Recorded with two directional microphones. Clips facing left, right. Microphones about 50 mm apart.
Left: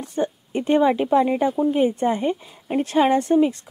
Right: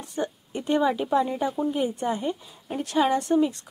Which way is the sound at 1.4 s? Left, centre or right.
Left.